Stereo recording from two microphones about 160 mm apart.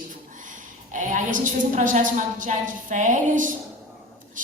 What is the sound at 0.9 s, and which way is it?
A woman's voice, 55° right (ahead or behind).